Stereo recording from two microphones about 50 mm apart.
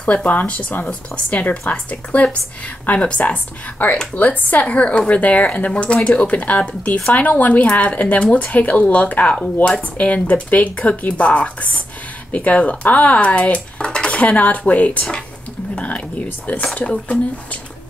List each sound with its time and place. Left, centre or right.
0.0 s speech: left
16.7 s speech: left